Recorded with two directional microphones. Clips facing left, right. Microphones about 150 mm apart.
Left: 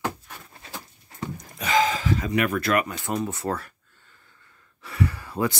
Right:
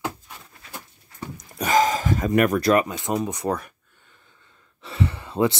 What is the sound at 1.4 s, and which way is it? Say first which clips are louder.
Speech: right 3 dB; 45° right (ahead or behind).